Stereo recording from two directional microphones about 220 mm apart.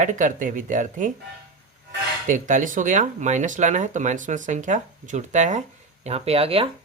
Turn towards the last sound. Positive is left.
turn(degrees=-25)  # may be behind; listen again after turning